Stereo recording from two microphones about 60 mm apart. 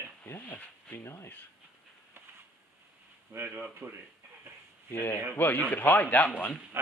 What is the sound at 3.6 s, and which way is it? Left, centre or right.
Speech, right.